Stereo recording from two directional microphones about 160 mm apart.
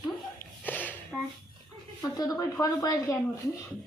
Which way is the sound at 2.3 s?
15° left (ahead or behind).